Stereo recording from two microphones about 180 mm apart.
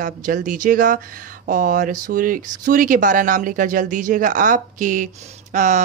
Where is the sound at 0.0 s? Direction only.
50° right (ahead or behind).